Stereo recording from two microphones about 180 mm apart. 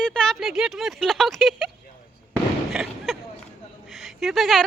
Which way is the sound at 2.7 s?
Centre (ahead or behind).